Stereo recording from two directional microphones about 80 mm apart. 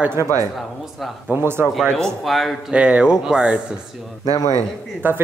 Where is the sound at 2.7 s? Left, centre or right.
Centre.